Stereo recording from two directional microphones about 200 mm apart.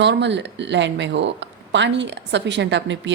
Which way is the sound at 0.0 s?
60° right (ahead or behind).